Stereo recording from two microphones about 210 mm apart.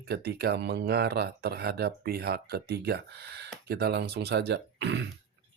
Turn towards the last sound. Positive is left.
turn(degrees=-60)  # may be behind; listen again after turning